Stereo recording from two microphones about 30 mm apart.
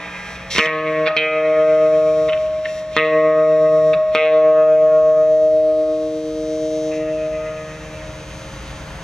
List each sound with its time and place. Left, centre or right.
0.5 s music: left